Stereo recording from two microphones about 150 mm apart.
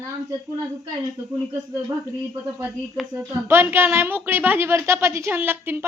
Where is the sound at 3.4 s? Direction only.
15° right (ahead or behind).